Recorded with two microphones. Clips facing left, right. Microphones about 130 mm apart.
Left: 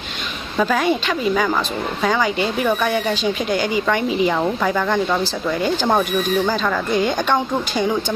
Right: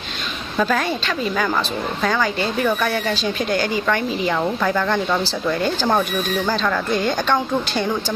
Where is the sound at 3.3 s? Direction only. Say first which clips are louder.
Even; centre (ahead or behind).